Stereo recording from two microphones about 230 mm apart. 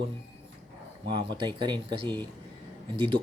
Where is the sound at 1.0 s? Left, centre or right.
Centre.